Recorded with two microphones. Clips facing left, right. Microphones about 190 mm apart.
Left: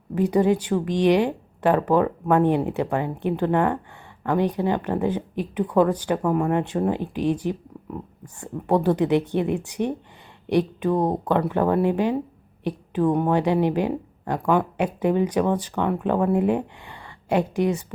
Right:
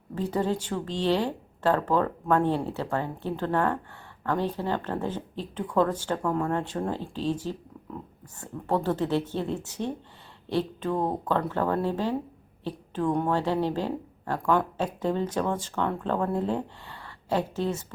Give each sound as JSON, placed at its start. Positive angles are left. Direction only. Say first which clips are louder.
{"t": 0.1, "sound": "speech", "louder": "left 8 dB", "side_deg": 15}
{"t": 8.6, "sound": "speech", "louder": "left 6 dB", "side_deg": 15}